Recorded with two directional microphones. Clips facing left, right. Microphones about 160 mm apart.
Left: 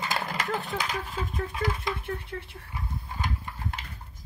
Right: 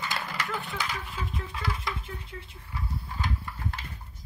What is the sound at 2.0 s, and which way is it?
Speech, 65° left (ahead or behind).